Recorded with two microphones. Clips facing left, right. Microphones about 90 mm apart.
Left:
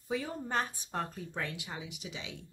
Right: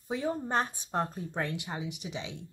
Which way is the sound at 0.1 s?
30° right (ahead or behind).